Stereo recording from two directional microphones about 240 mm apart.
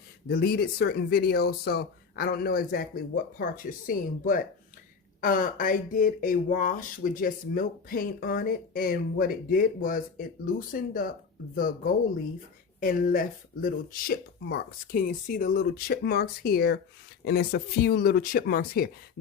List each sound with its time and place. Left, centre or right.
0.3 s speech: left
12.8 s speech: left